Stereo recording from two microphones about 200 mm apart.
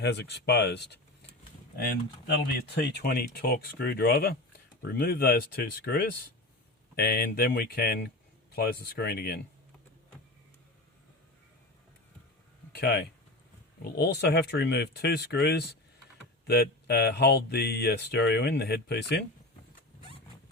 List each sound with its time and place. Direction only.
0.0 s speech: 60° left (ahead or behind)
12.7 s speech: 50° left (ahead or behind)